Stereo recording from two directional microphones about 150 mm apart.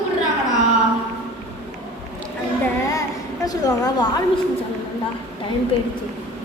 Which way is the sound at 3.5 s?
25° left (ahead or behind).